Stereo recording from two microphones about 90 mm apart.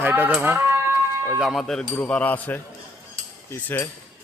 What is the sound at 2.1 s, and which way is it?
Speech, 15° left (ahead or behind).